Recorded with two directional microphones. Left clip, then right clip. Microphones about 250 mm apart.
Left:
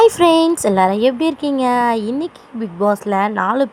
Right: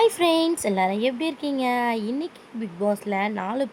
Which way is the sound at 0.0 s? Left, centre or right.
Centre.